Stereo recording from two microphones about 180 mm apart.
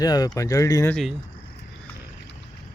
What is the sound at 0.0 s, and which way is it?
Speech, 20° left (ahead or behind).